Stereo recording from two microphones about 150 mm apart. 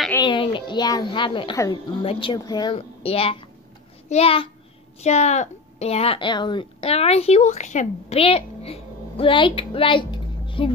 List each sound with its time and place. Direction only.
0.2 s a child's voice: 35° left (ahead or behind)
2.7 s a woman's voice: 40° left (ahead or behind)